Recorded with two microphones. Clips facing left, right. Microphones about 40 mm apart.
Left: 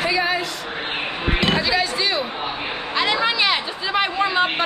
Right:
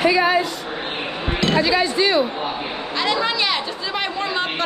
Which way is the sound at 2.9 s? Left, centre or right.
Centre.